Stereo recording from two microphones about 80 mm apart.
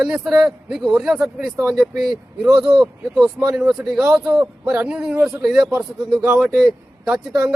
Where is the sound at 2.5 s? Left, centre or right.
Right.